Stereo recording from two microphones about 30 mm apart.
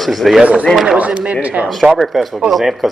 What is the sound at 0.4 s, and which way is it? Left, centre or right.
Speech, right.